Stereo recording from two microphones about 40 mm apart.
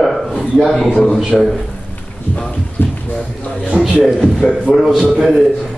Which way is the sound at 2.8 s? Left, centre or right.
Left.